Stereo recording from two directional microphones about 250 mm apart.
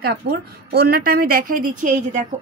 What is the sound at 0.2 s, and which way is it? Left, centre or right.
A woman's voice, right.